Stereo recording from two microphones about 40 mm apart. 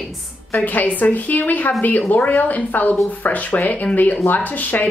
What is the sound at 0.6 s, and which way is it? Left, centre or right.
Speech, left.